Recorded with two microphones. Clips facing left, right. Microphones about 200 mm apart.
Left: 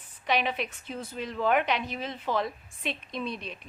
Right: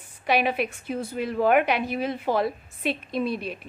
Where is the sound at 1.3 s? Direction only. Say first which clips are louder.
Right 5 dB; 50° right (ahead or behind).